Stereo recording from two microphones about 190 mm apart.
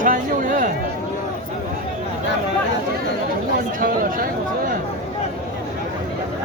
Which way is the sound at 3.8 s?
45° right (ahead or behind).